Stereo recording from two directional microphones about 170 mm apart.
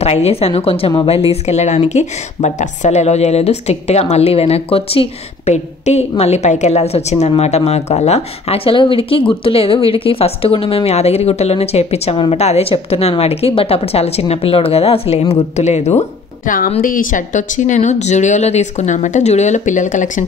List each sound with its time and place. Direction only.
0.0 s a woman's voice: 40° left (ahead or behind)